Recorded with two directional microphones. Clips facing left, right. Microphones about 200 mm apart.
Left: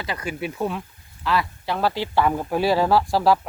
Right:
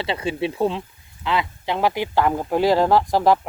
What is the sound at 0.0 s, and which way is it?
Speech, 25° right (ahead or behind).